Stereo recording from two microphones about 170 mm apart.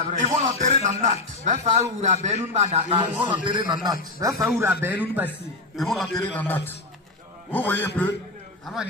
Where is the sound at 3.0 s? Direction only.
25° right (ahead or behind).